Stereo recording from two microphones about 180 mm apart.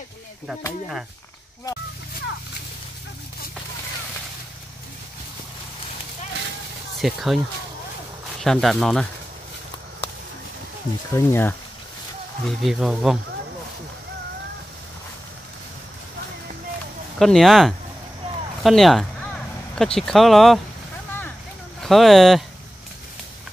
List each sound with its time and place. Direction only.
7.0 s speech: centre (ahead or behind)
8.4 s speech: centre (ahead or behind)
11.1 s speech: 10° left (ahead or behind)
12.4 s speech: centre (ahead or behind)
17.2 s speech: centre (ahead or behind)
21.8 s speech: centre (ahead or behind)